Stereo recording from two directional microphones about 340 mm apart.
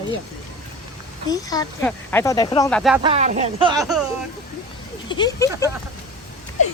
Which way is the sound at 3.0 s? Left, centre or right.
Centre.